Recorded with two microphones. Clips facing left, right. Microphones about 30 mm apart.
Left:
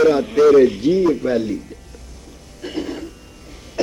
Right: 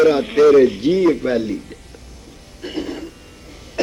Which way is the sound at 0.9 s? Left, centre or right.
Right.